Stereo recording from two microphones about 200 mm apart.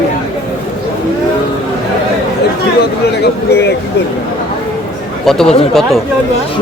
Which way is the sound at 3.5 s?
55° left (ahead or behind).